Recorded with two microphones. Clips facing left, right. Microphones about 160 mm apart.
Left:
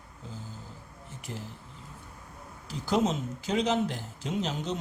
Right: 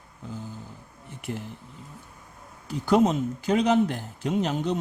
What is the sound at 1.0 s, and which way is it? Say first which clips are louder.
Speech: right 7 dB; 60° right (ahead or behind).